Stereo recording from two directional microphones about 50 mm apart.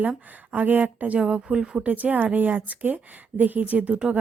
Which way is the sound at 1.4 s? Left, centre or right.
Centre.